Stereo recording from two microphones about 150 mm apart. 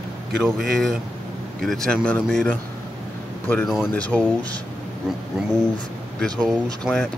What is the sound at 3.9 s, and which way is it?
Speech, 10° left (ahead or behind).